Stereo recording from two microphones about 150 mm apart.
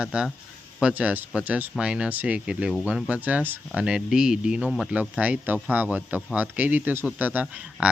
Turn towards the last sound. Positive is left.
turn(degrees=-10)  # may be behind; listen again after turning